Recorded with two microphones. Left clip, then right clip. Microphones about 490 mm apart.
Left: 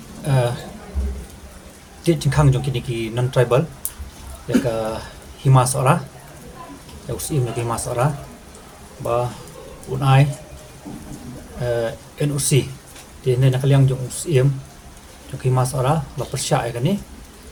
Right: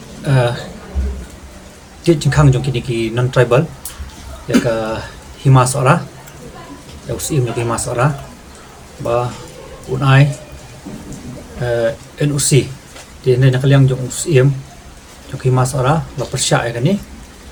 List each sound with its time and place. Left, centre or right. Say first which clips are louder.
0.3 s a sound: right 5 dB; left
2.0 s speech: right 5 dB; left
7.2 s speech: right 6 dB; left
11.6 s speech: right 6 dB; left
15.5 s speech: right 4 dB; left